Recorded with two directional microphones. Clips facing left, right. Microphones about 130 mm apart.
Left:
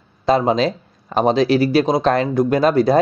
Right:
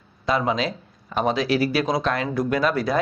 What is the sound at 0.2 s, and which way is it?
Speech, 35° left (ahead or behind).